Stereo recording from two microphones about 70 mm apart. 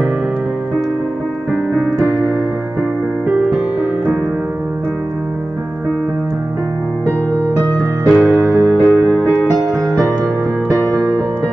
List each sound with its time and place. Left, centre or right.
3.3 s music: centre
8.1 s music: centre
8.4 s music: right